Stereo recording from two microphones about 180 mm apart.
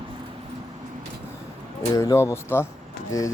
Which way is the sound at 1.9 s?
15° left (ahead or behind).